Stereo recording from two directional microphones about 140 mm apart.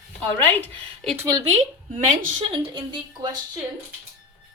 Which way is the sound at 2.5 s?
35° right (ahead or behind).